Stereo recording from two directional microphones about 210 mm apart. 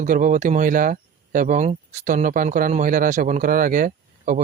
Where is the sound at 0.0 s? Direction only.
40° right (ahead or behind).